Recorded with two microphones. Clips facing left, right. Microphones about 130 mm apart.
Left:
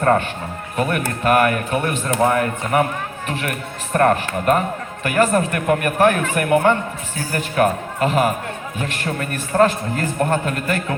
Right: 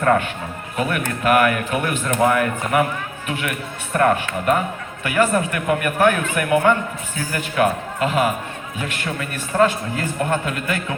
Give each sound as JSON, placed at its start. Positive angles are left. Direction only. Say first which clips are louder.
{"t": 0.0, "sound": "a man's voice", "louder": "left 1 dB", "side_deg": 35}